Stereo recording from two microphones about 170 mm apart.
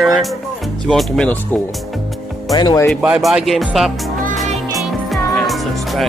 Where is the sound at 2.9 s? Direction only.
5° right (ahead or behind).